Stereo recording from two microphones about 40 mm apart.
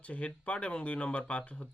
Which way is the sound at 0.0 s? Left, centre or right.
Left.